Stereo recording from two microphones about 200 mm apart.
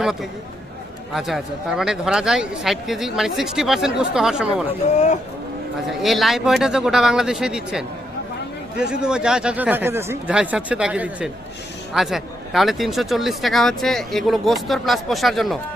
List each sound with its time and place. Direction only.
0.0 s speech: centre (ahead or behind)
4.8 s speech: 35° left (ahead or behind)
5.9 s speech: centre (ahead or behind)